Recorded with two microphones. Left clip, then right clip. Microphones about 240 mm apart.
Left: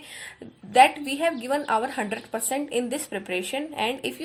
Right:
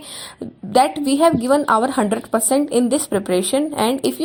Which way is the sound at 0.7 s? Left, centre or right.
Right.